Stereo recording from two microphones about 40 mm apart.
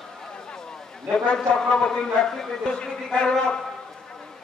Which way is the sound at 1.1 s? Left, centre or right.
Left.